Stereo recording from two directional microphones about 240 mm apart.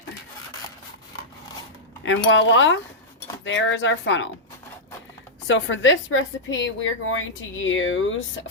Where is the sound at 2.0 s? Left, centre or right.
Left.